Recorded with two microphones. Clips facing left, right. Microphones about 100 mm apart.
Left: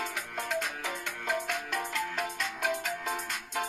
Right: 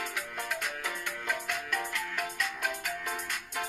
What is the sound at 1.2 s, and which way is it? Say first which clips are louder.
Music: left 3 dB; 25° left (ahead or behind).